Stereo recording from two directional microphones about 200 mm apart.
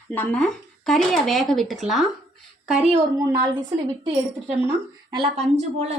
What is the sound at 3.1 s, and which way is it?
A woman's voice, 15° right (ahead or behind).